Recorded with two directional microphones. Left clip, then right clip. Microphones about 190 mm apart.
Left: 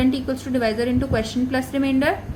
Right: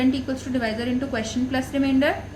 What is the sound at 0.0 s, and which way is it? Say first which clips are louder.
A woman's voice: left 2 dB; 45° left (ahead or behind).